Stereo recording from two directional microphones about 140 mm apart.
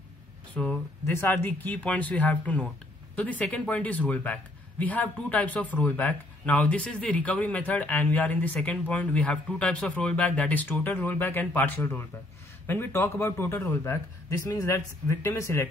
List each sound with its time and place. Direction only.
0.6 s a man's voice: 10° left (ahead or behind)